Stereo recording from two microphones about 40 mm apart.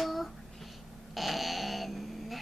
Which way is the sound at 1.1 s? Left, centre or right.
Centre.